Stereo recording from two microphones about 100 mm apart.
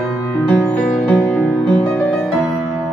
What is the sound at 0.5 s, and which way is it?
Music, 20° left (ahead or behind).